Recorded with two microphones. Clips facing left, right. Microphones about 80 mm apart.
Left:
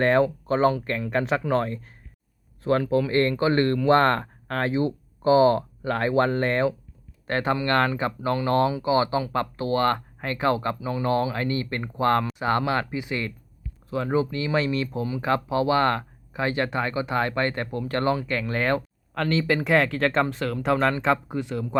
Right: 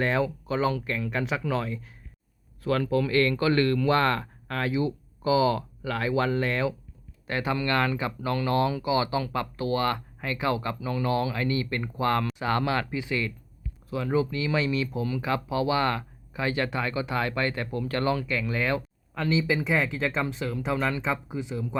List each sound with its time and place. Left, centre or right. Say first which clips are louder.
0.0 s speech: left 6 dB; left
2.6 s speech: left 3 dB; left
3.8 s speech: left 5 dB; left
10.8 s speech: left 2 dB; left
11.0 s speech: left 3 dB; left
12.4 s speech: left 3 dB; left
18.3 s speech: left 3 dB; left
19.1 s speech: left 2 dB; left